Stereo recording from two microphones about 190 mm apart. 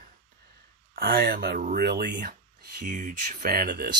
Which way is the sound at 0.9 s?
50° right (ahead or behind).